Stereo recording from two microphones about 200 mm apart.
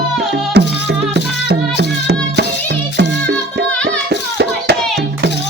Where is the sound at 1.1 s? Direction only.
60° right (ahead or behind).